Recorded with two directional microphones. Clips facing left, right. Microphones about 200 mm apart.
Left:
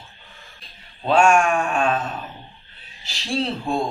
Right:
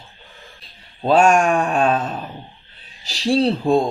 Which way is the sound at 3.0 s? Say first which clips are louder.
Right 8 dB; 35° right (ahead or behind).